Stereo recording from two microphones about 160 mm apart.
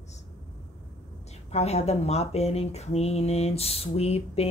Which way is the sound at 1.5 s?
40° left (ahead or behind).